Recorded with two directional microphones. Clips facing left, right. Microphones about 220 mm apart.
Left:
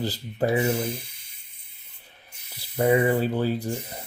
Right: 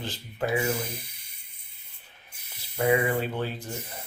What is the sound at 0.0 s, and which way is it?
Speech, 35° left (ahead or behind).